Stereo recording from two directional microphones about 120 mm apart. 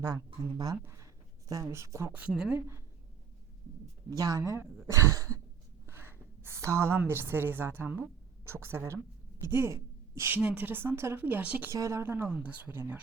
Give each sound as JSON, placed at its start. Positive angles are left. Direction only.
{"t": 0.5, "sound": "a woman's voice", "side_deg": -30}
{"t": 4.2, "sound": "a woman's voice", "side_deg": -30}
{"t": 11.7, "sound": "a woman's voice", "side_deg": -25}